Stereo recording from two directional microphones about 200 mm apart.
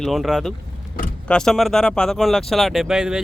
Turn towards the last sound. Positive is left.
turn(degrees=-5)  # may be behind; listen again after turning